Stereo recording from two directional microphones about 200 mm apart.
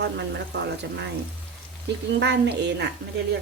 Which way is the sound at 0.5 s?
60° right (ahead or behind).